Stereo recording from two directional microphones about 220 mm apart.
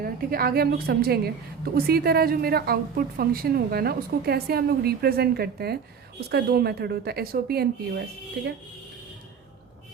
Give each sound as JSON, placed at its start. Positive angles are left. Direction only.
{"t": 0.0, "sound": "a woman's voice", "side_deg": -40}